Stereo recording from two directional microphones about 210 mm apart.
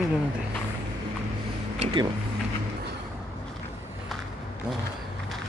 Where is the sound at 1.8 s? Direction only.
20° right (ahead or behind).